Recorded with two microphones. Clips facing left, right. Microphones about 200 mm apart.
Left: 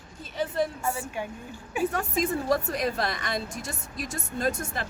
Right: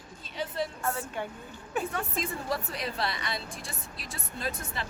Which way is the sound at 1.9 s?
45° left (ahead or behind).